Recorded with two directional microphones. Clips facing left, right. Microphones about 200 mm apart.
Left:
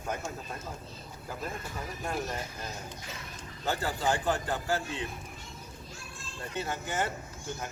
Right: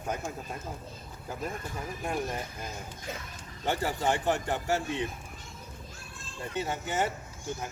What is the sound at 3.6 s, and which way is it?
Speech, 25° right (ahead or behind).